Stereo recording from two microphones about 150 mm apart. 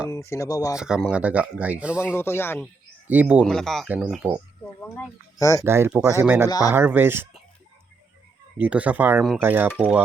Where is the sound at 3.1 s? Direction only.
10° right (ahead or behind).